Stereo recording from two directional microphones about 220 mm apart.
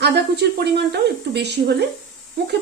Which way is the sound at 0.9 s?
50° right (ahead or behind).